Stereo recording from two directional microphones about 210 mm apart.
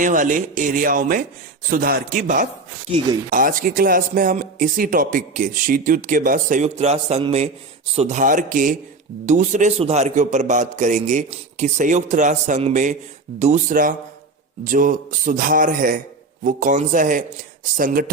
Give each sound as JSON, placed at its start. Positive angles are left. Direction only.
{"t": 0.0, "sound": "speech", "side_deg": -40}